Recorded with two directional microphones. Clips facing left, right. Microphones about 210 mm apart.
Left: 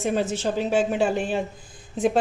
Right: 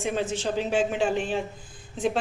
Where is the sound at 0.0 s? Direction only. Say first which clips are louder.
Left 3 dB; 40° left (ahead or behind).